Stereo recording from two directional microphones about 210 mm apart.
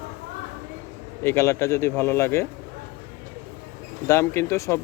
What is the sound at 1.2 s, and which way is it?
Speech, 15° left (ahead or behind).